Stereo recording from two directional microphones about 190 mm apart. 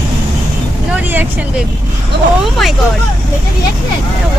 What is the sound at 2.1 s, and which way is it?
Speech, 65° right (ahead or behind).